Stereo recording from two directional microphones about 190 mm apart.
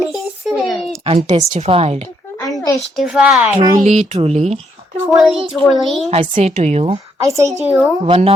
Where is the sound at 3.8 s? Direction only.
40° right (ahead or behind).